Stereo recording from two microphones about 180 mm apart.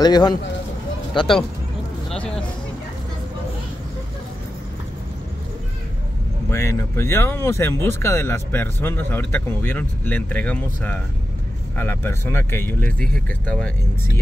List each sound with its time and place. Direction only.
0.0 s speech: 25° left (ahead or behind)
2.0 s music: 5° left (ahead or behind)
6.5 s speech: 15° left (ahead or behind)